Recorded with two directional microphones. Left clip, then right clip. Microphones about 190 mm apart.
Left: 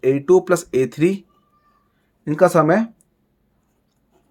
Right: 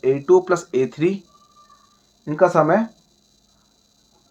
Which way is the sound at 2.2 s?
60° left (ahead or behind).